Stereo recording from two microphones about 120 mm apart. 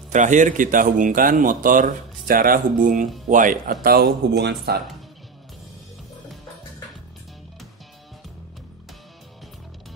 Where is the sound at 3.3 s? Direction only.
90° right.